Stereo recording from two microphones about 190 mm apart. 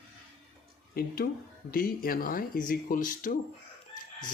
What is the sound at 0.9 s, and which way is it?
Speech, 50° left (ahead or behind).